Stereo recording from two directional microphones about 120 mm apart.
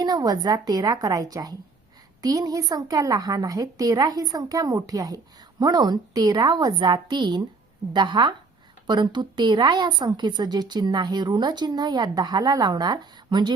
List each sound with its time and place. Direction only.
0.0 s a woman's voice: 35° right (ahead or behind)